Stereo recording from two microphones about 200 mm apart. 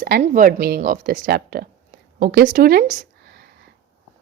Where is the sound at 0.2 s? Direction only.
40° right (ahead or behind).